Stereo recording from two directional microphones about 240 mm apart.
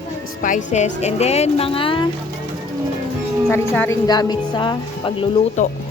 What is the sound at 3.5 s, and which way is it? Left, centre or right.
A woman's voice, centre.